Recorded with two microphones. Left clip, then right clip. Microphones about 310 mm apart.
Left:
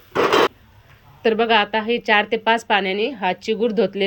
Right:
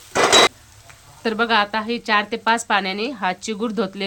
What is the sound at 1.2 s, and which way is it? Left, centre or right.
A woman's voice, centre.